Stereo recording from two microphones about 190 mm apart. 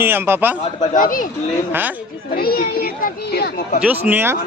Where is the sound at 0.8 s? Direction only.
45° left (ahead or behind).